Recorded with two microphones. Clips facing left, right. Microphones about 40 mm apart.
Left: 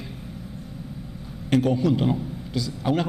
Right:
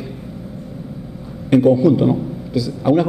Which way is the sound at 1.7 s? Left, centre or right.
Left.